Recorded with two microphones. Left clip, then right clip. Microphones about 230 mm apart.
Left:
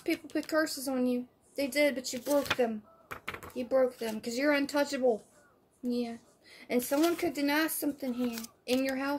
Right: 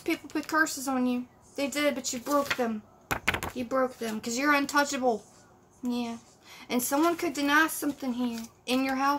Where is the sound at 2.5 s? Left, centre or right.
Centre.